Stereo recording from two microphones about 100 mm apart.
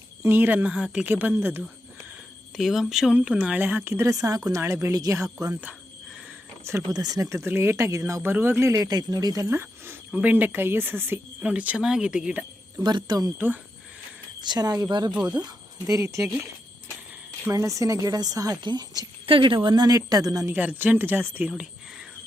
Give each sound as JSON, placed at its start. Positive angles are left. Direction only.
{"t": 0.2, "sound": "speech", "side_deg": -20}
{"t": 2.6, "sound": "speech", "side_deg": 0}
{"t": 6.7, "sound": "speech", "side_deg": -25}
{"t": 10.1, "sound": "speech", "side_deg": -15}
{"t": 12.7, "sound": "speech", "side_deg": -45}
{"t": 14.4, "sound": "speech", "side_deg": -45}
{"t": 15.1, "sound": "speech", "side_deg": -10}
{"t": 15.9, "sound": "speech", "side_deg": -30}
{"t": 17.5, "sound": "speech", "side_deg": -30}
{"t": 19.2, "sound": "speech", "side_deg": -60}
{"t": 19.6, "sound": "speech", "side_deg": -45}
{"t": 20.5, "sound": "speech", "side_deg": -15}
{"t": 21.5, "sound": "whispering", "side_deg": -5}